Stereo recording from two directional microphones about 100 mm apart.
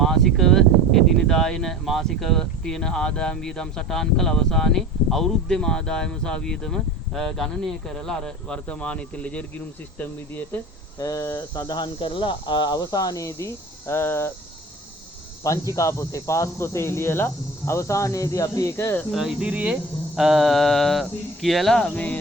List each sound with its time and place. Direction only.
0.0 s speech: 5° left (ahead or behind)
10.9 s speech: 35° left (ahead or behind)
15.4 s speech: 35° left (ahead or behind)
19.4 s speech: 15° right (ahead or behind)
20.1 s speech: centre (ahead or behind)